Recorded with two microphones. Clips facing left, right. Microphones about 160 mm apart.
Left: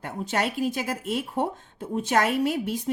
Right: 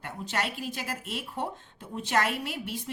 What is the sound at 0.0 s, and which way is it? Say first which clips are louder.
A woman's voice: left 5 dB; 50° left (ahead or behind).